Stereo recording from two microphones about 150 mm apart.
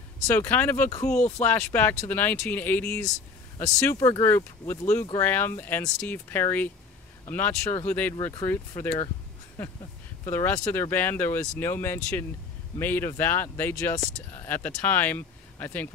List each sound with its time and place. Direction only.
0.3 s speech: 15° left (ahead or behind)
10.2 s speech: 20° left (ahead or behind)